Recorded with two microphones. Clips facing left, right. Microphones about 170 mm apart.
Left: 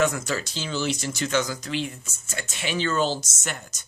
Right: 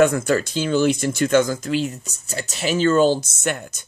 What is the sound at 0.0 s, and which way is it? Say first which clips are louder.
Speech: right 8 dB; 55° right (ahead or behind).